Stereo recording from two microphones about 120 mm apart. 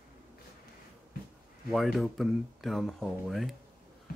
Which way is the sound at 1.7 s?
Centre (ahead or behind).